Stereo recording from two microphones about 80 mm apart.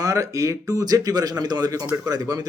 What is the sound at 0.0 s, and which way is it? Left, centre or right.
Speech, right.